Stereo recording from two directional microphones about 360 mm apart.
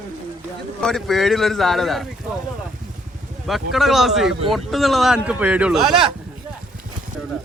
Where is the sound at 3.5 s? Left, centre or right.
Centre.